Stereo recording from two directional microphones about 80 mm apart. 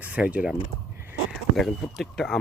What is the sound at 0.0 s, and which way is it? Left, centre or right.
Speech, centre.